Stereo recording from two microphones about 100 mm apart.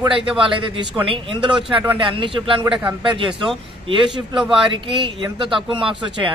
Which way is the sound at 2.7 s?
15° right (ahead or behind).